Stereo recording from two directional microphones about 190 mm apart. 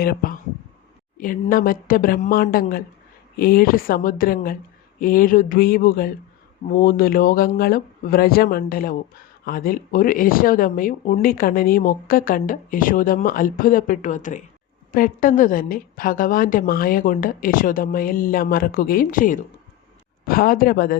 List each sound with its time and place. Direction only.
0.0 s speech: 50° left (ahead or behind)